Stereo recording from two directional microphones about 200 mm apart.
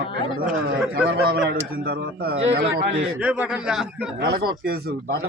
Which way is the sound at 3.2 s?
5° right (ahead or behind).